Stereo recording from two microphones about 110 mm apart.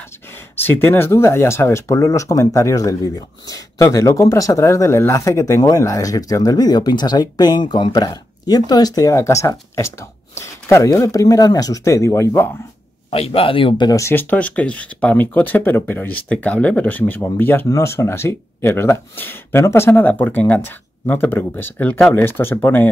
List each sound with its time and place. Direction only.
0.6 s speech: 20° left (ahead or behind)
13.1 s a man's voice: 60° left (ahead or behind)
13.8 s speech: 30° left (ahead or behind)
14.1 s speech: 15° left (ahead or behind)